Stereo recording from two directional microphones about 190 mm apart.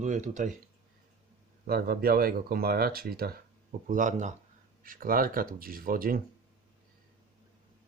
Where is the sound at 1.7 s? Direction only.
50° right (ahead or behind).